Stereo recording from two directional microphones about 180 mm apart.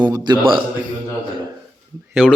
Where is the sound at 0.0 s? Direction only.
20° right (ahead or behind).